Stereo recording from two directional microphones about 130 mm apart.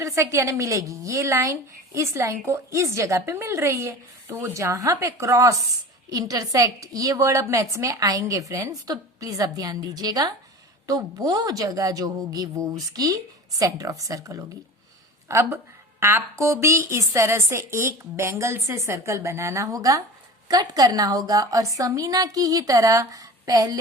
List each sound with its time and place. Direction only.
0.0 s a woman's voice: 25° right (ahead or behind)